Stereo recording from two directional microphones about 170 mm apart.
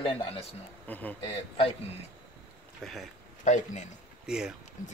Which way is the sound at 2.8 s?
Centre (ahead or behind).